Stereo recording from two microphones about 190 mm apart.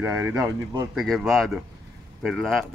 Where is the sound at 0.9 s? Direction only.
Centre (ahead or behind).